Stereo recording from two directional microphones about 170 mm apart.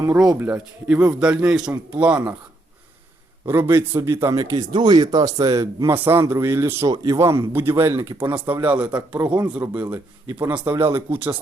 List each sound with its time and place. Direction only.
0.3 s a man's voice: 10° right (ahead or behind)
3.4 s speech: 15° right (ahead or behind)